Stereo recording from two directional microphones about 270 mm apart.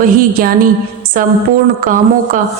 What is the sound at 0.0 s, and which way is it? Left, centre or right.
A woman's voice, right.